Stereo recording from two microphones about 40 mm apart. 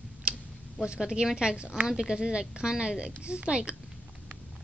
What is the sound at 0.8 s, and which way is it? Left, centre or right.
Speech, centre.